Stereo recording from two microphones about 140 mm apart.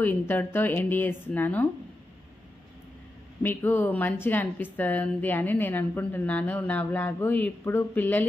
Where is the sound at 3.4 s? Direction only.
15° left (ahead or behind).